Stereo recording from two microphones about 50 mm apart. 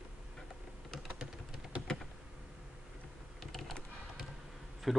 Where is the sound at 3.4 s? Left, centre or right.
Centre.